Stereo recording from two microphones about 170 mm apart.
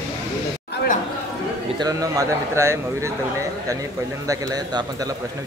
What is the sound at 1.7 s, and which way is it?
A man's voice, 20° right (ahead or behind).